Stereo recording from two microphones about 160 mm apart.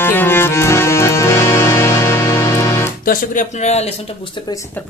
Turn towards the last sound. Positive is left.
turn(degrees=45)  # may be behind; listen again after turning